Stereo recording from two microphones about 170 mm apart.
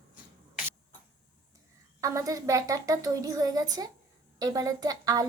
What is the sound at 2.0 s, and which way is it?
A woman's voice, 20° right (ahead or behind).